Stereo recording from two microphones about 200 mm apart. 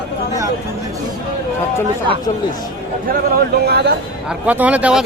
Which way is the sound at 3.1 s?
50° right (ahead or behind).